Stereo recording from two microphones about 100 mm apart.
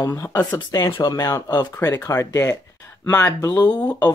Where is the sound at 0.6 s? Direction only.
35° left (ahead or behind).